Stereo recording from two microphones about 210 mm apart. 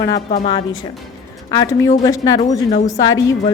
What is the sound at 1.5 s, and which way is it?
A woman's voice, 15° left (ahead or behind).